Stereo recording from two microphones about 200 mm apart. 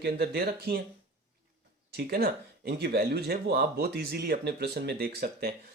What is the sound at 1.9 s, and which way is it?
Speech, 50° right (ahead or behind).